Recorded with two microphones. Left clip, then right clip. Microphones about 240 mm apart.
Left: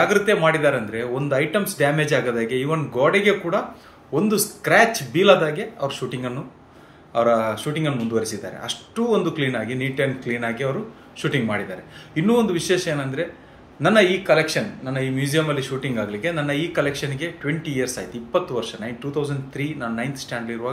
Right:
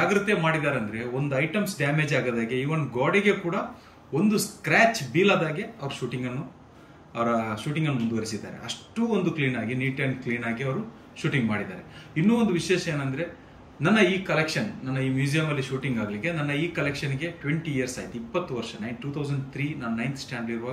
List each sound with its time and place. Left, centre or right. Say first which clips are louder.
0.0 s speech: left 6 dB; centre
5.3 s a man's voice: left 8 dB; left
5.9 s speech: left 5 dB; centre